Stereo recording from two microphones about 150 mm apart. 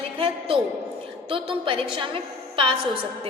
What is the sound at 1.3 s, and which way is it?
A woman's voice, 35° right (ahead or behind).